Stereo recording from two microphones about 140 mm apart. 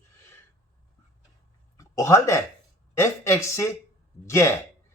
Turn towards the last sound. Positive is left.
turn(degrees=20)  # may be behind; listen again after turning